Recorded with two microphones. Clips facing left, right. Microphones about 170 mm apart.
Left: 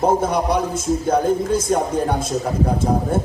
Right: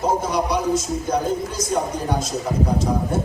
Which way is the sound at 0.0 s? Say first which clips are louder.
Left 3 dB; 55° left (ahead or behind).